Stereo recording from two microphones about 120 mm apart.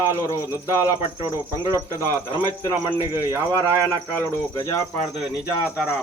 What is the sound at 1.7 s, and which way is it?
Speech, 25° right (ahead or behind).